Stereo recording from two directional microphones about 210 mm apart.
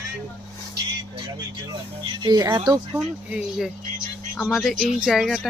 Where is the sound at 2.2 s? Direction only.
20° right (ahead or behind).